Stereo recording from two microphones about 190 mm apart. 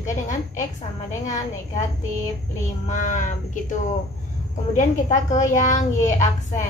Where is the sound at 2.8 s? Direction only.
40° left (ahead or behind).